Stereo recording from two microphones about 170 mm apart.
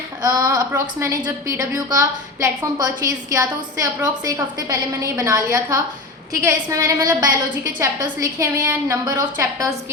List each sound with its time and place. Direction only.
0.2 s a woman's voice: 20° right (ahead or behind)